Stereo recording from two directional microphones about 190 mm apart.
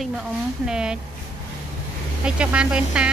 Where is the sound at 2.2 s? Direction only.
5° right (ahead or behind).